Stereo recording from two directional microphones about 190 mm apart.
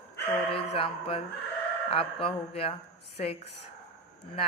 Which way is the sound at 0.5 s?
30° left (ahead or behind).